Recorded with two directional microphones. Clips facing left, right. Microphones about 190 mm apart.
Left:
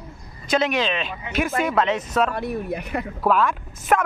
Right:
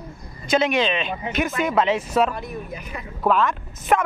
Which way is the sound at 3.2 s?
5° left (ahead or behind).